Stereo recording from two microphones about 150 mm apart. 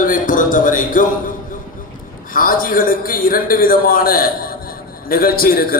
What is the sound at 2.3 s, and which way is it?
A man's voice, 70° left (ahead or behind).